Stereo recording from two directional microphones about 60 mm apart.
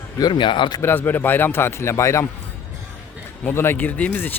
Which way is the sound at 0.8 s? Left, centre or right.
Left.